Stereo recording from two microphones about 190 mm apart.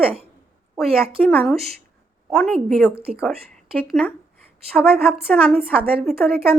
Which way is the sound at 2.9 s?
30° right (ahead or behind).